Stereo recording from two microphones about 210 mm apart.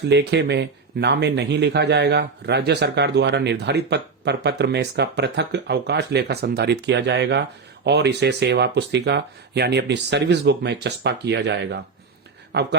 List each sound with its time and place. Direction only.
0.0 s speech: 55° right (ahead or behind)